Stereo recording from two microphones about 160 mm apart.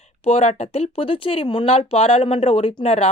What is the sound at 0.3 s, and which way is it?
Speech, 40° left (ahead or behind).